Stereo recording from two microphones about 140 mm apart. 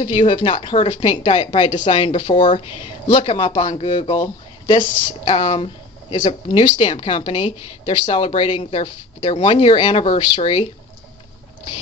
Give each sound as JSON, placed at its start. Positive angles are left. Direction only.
{"t": 0.0, "sound": "speech", "side_deg": 40}